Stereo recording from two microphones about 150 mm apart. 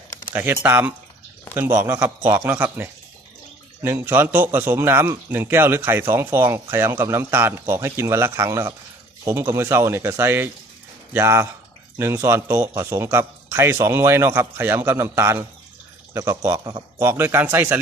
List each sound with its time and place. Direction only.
0.3 s a man's voice: 15° right (ahead or behind)